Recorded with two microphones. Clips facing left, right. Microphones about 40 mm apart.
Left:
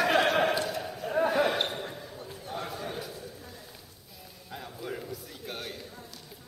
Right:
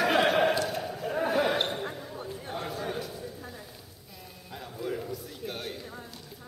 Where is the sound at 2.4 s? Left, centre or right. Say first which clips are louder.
Left 2 dB; right.